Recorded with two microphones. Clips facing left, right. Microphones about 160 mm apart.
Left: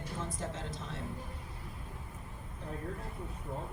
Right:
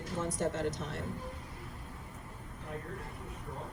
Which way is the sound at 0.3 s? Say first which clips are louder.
Right 7 dB; 70° right (ahead or behind).